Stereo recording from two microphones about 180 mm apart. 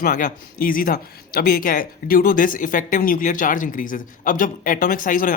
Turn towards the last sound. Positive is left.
turn(degrees=50)  # may be behind; listen again after turning